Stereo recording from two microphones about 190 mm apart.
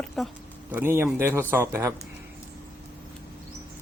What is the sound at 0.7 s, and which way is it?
Speech, 10° right (ahead or behind).